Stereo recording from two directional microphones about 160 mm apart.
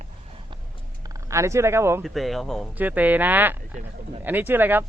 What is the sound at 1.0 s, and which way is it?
Speech, 20° right (ahead or behind).